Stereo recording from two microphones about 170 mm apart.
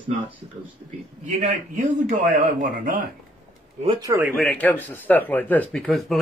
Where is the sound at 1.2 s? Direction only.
50° right (ahead or behind).